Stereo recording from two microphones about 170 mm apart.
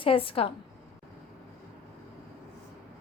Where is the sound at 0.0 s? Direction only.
35° left (ahead or behind).